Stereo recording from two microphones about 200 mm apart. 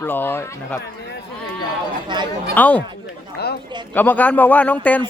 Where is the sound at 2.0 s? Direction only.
25° right (ahead or behind).